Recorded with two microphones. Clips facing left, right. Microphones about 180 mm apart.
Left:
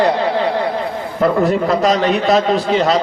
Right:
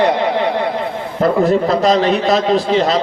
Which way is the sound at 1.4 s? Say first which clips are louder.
Right 1 dB; 40° right (ahead or behind).